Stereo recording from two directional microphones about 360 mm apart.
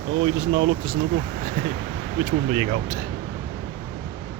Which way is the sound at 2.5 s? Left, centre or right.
Centre.